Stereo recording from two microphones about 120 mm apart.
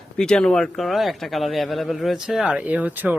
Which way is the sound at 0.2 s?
5° left (ahead or behind).